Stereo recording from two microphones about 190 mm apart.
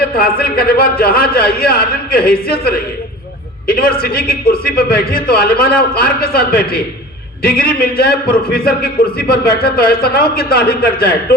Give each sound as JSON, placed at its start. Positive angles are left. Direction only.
{"t": 0.2, "sound": "a man's voice", "side_deg": 50}